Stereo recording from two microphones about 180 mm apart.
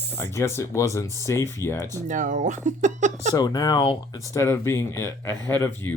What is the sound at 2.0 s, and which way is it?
Speech, 45° right (ahead or behind).